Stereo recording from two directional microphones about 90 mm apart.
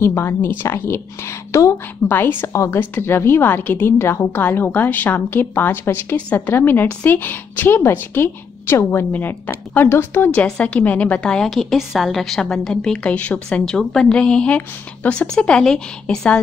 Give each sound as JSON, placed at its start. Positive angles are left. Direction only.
{"t": 0.0, "sound": "a woman's voice", "side_deg": 25}
{"t": 10.3, "sound": "a woman's voice", "side_deg": 15}